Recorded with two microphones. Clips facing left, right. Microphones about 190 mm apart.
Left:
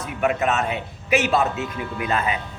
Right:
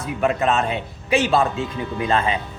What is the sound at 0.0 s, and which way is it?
Speech, 30° right (ahead or behind).